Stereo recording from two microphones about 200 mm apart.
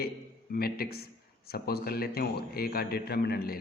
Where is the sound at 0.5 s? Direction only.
50° left (ahead or behind).